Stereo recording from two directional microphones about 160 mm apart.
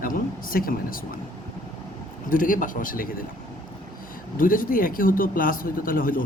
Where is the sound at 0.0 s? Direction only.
60° left (ahead or behind).